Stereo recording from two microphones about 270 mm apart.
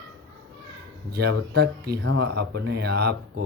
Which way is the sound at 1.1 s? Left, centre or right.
Right.